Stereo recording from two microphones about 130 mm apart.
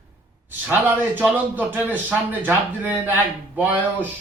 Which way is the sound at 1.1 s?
15° right (ahead or behind).